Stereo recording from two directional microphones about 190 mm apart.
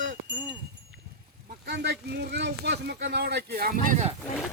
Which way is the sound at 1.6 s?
60° right (ahead or behind).